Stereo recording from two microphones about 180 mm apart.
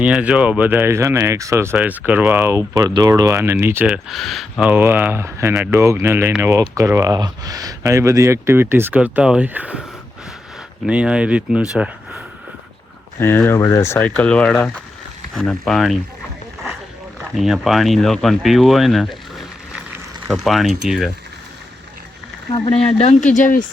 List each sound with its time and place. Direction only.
0.0 s speech: 5° right (ahead or behind)
4.7 s speech: 10° right (ahead or behind)
10.8 s speech: 5° right (ahead or behind)
13.1 s speech: 10° left (ahead or behind)
17.3 s speech: centre (ahead or behind)
20.3 s speech: centre (ahead or behind)
22.6 s speech: 30° left (ahead or behind)